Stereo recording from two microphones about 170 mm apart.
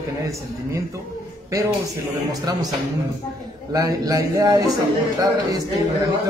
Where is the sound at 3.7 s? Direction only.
20° right (ahead or behind).